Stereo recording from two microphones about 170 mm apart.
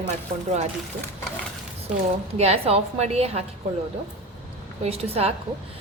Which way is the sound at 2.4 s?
35° right (ahead or behind).